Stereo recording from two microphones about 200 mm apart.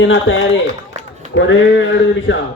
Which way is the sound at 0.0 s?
70° left (ahead or behind).